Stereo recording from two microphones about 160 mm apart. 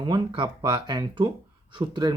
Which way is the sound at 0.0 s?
30° right (ahead or behind).